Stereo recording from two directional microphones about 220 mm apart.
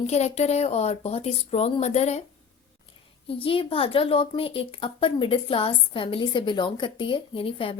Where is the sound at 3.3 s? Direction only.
25° left (ahead or behind).